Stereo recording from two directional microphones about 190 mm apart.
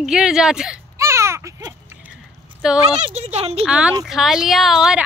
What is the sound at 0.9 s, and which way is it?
Baby cry, 15° right (ahead or behind).